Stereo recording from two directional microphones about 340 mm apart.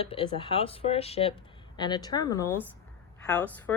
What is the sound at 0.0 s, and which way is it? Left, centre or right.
Speech, centre.